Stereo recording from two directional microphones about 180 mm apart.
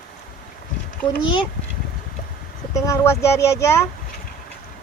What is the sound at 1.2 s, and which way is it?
Speech, 25° left (ahead or behind).